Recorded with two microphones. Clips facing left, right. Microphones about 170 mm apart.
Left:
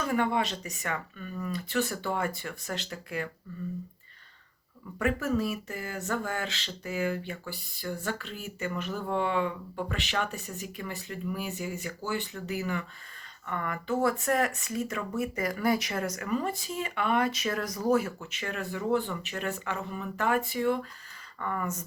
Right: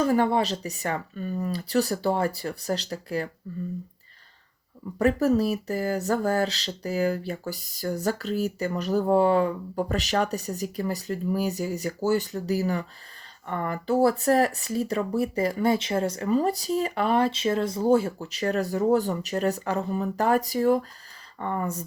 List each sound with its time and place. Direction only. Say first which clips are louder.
0.0 s speech: right 6 dB; 35° right (ahead or behind)
4.9 s speech: right 7 dB; 35° right (ahead or behind)